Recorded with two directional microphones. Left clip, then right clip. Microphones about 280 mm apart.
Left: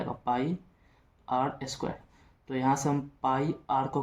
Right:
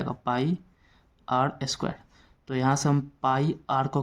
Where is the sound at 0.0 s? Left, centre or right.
Right.